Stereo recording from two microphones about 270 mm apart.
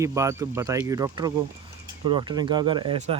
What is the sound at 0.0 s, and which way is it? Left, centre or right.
Speech, centre.